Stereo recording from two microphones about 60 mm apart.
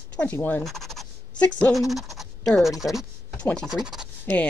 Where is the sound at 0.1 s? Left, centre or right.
Left.